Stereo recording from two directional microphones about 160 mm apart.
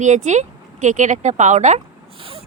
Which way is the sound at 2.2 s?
35° right (ahead or behind).